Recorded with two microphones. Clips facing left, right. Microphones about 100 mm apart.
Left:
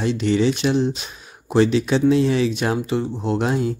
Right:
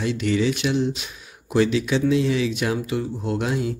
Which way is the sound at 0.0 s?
30° left (ahead or behind).